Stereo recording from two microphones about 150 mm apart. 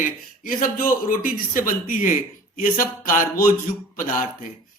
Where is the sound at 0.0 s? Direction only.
65° left (ahead or behind).